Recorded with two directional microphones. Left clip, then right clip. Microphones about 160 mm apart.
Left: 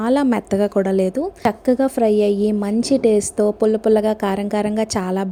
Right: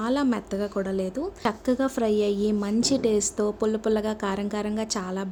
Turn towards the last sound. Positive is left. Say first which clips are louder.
# left 9 dB
turn(degrees=40)  # may be behind; listen again after turning